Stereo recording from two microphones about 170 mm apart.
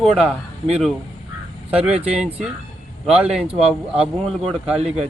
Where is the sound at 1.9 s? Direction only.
35° right (ahead or behind).